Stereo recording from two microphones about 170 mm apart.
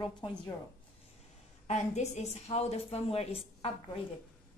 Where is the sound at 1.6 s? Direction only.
40° left (ahead or behind).